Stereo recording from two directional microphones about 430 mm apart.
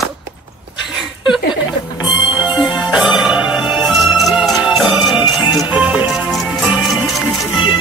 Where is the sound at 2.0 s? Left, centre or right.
Centre.